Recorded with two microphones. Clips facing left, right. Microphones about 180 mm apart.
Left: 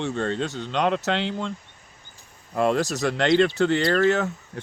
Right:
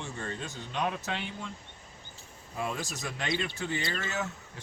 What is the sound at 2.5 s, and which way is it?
Speech, 75° left (ahead or behind).